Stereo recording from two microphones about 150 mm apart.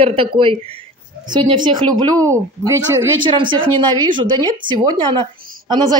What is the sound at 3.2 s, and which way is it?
Speech, 35° right (ahead or behind).